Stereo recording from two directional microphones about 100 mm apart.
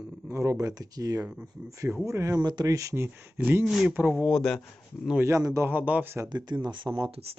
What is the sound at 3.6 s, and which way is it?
Speech, 5° right (ahead or behind).